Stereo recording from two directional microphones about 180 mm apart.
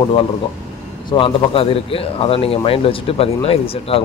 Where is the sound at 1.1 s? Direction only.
30° left (ahead or behind).